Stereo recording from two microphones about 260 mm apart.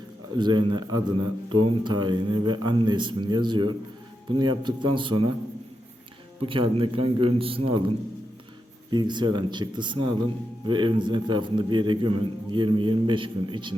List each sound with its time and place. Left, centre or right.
0.3 s speech: centre
6.4 s speech: centre
8.9 s speech: centre